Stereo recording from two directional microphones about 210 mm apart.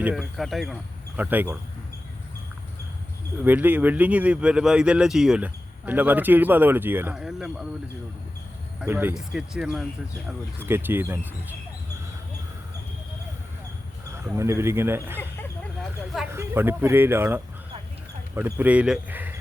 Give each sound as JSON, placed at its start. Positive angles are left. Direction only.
{"t": 0.0, "sound": "speech", "side_deg": 0}
{"t": 3.4, "sound": "speech", "side_deg": -10}
{"t": 8.8, "sound": "speech", "side_deg": -10}
{"t": 14.3, "sound": "speech", "side_deg": -15}
{"t": 15.2, "sound": "a sound", "side_deg": 10}
{"t": 16.3, "sound": "speech", "side_deg": -10}